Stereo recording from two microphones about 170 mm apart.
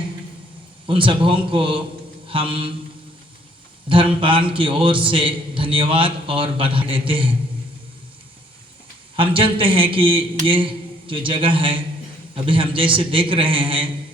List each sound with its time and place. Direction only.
0.9 s a man's voice: 30° right (ahead or behind)
2.2 s mantra: 30° right (ahead or behind)
3.8 s a man's voice: 30° right (ahead or behind)
9.1 s a man's voice: 30° right (ahead or behind)